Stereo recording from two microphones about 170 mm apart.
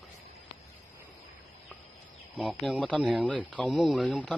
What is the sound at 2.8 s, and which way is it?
Speech, 5° left (ahead or behind).